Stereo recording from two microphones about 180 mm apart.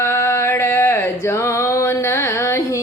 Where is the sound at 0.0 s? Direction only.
15° left (ahead or behind).